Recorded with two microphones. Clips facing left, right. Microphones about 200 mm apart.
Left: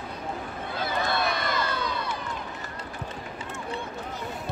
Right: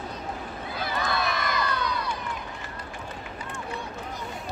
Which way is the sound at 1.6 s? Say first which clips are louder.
Right 1 dB; 25° left (ahead or behind).